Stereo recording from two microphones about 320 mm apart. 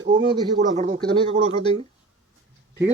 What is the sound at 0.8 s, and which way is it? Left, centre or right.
Speech, centre.